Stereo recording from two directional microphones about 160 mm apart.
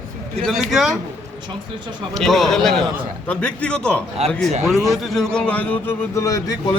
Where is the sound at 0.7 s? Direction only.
Centre (ahead or behind).